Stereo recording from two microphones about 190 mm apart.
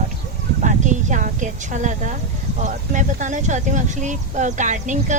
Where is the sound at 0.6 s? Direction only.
40° right (ahead or behind).